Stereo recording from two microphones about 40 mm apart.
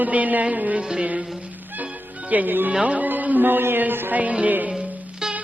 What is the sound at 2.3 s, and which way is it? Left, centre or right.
Speech, right.